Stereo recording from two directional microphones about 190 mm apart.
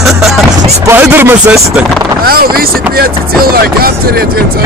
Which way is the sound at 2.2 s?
50° right (ahead or behind).